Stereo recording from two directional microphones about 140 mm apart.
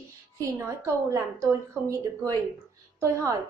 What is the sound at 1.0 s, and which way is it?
A woman's voice, 20° right (ahead or behind).